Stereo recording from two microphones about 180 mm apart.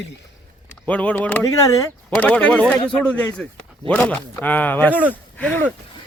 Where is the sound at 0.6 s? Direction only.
10° left (ahead or behind).